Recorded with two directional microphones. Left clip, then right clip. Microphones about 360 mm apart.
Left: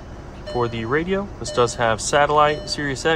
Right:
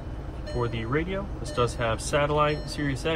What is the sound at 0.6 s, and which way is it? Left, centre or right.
Speech, centre.